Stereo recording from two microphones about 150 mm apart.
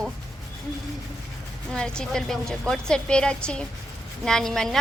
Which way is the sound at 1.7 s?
5° left (ahead or behind).